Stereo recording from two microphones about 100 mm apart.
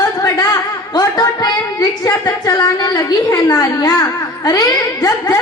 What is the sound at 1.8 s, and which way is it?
A woman's voice, 35° left (ahead or behind).